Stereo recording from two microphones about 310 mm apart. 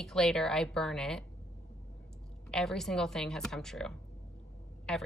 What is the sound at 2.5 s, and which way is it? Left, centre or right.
Speech, centre.